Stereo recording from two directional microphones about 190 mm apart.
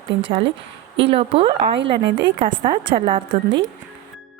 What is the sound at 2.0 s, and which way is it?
Speech, 70° right (ahead or behind).